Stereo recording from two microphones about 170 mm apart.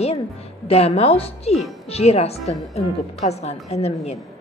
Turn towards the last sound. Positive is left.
turn(degrees=40)  # may be behind; listen again after turning